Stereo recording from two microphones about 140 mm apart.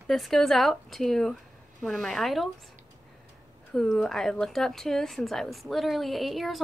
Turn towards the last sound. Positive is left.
turn(degrees=0)  # may be behind; listen again after turning